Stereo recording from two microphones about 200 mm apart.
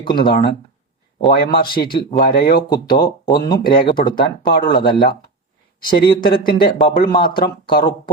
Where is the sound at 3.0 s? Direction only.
20° left (ahead or behind).